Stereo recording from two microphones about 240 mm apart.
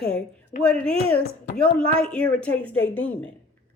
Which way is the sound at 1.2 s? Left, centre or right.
Left.